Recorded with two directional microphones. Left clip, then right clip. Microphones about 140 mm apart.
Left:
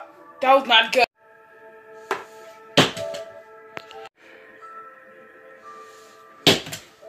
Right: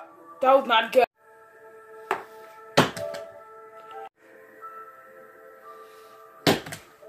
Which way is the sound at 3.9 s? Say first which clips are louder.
Even; 5° left (ahead or behind).